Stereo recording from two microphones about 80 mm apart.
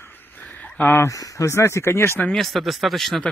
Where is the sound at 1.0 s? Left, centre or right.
Left.